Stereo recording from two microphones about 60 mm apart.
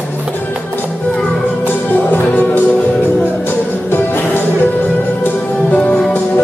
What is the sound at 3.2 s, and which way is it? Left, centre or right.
Music, left.